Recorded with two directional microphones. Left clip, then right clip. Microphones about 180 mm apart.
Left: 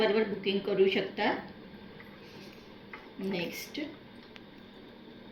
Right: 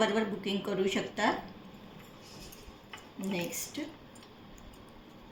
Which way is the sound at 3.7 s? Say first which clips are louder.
Left 4 dB; 60° right (ahead or behind).